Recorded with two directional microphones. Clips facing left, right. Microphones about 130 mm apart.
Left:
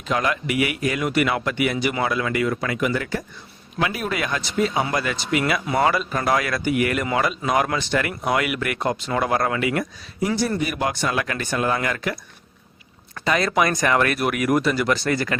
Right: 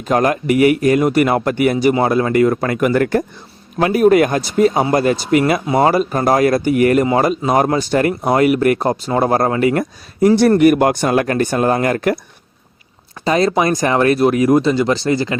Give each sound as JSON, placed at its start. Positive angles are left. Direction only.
{"t": 0.1, "sound": "speech", "side_deg": -45}
{"t": 3.8, "sound": "speech", "side_deg": -45}
{"t": 10.3, "sound": "speech", "side_deg": -65}
{"t": 13.2, "sound": "speech", "side_deg": -30}